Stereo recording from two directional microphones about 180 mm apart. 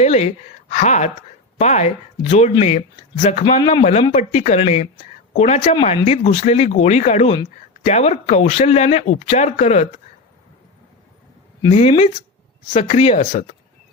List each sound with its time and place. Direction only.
0.0 s speech: 40° left (ahead or behind)
3.4 s speech: 25° left (ahead or behind)
11.7 s speech: 35° left (ahead or behind)